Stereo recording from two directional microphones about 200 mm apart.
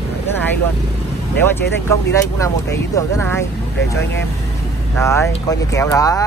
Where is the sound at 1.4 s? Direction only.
10° left (ahead or behind).